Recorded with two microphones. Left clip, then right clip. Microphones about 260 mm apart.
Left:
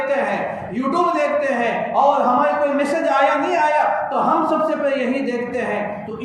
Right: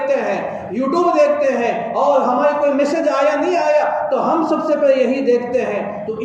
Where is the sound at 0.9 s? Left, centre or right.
Left.